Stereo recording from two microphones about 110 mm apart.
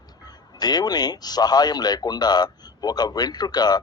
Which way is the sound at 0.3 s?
35° left (ahead or behind).